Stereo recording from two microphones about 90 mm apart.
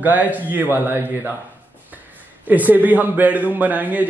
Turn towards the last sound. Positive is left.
turn(degrees=-20)  # may be behind; listen again after turning